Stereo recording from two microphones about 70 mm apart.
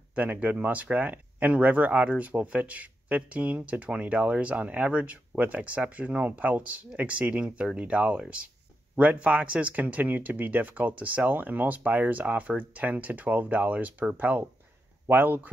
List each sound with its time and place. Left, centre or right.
0.1 s speech: right